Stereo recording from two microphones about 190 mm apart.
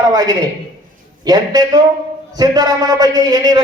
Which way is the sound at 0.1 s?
20° right (ahead or behind).